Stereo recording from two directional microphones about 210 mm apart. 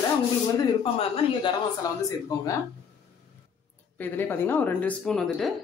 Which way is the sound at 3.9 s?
10° left (ahead or behind).